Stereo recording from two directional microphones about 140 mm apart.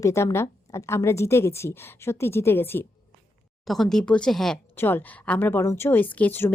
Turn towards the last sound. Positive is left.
turn(degrees=15)  # may be behind; listen again after turning